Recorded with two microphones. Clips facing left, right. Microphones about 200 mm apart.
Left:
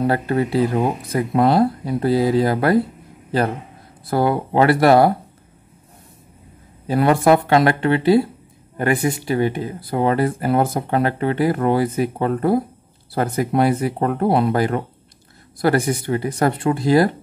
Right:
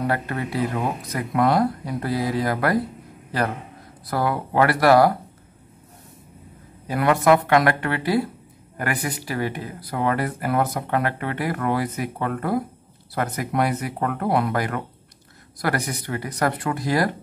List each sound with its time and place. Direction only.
0.0 s a man's voice: 30° left (ahead or behind)
6.9 s speech: 30° left (ahead or behind)